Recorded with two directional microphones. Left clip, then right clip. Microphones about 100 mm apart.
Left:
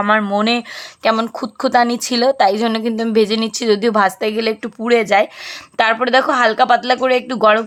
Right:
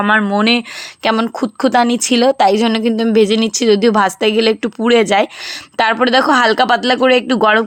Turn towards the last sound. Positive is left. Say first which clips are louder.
# right 2 dB
turn(degrees=-35)  # may be behind; listen again after turning